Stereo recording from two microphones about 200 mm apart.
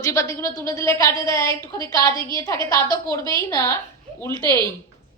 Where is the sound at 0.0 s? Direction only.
15° left (ahead or behind).